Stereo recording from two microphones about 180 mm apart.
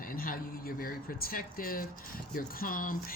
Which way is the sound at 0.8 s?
55° left (ahead or behind).